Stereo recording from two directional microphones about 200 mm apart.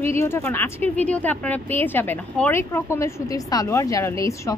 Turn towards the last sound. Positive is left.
turn(degrees=15)  # may be behind; listen again after turning